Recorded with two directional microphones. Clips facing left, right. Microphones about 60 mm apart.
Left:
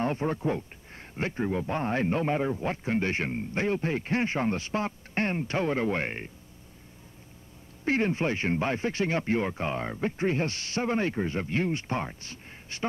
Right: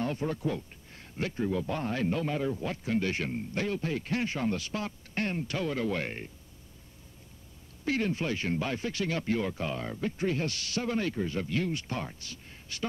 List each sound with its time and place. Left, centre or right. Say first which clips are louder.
0.0 s a man's voice: left 3 dB; left
7.8 s a man's voice: left 4 dB; left